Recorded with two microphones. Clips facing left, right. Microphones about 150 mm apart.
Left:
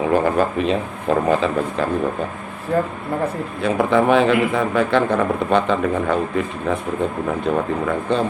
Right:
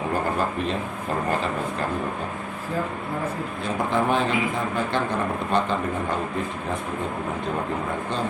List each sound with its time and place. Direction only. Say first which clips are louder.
0.1 s speech: left 7 dB; 80° left
1.3 s speech: left 7 dB; 90° left
2.7 s a man's voice: left 8 dB; 65° left (ahead or behind)